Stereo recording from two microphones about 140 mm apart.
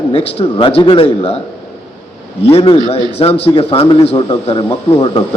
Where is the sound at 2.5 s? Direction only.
45° left (ahead or behind).